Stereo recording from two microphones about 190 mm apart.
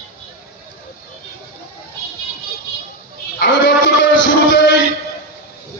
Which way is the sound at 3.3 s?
65° left (ahead or behind).